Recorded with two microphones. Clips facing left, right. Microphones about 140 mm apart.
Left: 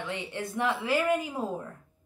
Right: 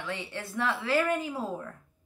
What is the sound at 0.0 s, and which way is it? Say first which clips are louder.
Speech: left 2 dB; 15° left (ahead or behind).